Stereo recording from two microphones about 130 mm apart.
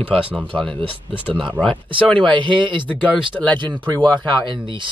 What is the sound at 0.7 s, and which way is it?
Speech, 40° right (ahead or behind).